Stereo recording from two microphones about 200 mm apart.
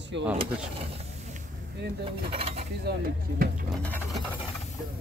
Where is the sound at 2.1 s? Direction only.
30° right (ahead or behind).